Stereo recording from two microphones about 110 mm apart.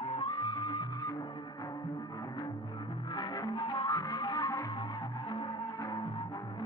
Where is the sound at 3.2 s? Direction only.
45° left (ahead or behind).